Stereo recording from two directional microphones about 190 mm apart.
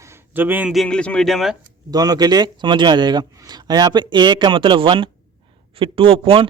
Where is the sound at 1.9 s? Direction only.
20° right (ahead or behind).